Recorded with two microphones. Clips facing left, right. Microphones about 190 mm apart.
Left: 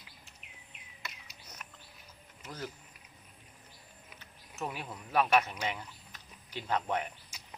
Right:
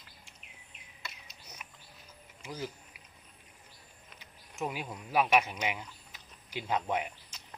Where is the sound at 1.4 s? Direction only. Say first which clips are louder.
Even; 10° right (ahead or behind).